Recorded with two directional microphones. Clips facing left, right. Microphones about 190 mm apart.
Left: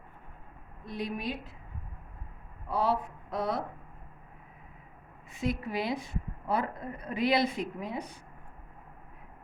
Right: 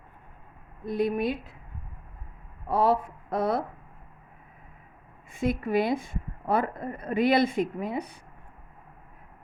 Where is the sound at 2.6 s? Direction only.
50° right (ahead or behind).